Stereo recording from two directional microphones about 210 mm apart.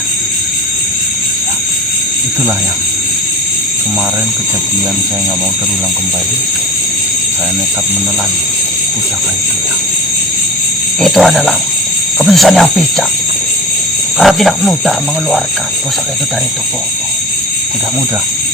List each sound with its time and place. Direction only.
11.0 s speech: centre (ahead or behind)
14.2 s speech: centre (ahead or behind)